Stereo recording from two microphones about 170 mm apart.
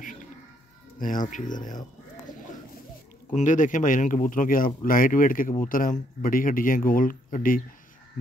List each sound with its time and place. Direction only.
0.9 s speech: 50° left (ahead or behind)
3.3 s a man's voice: 50° left (ahead or behind)